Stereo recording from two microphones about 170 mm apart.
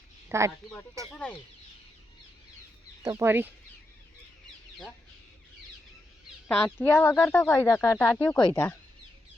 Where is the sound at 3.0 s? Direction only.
15° right (ahead or behind).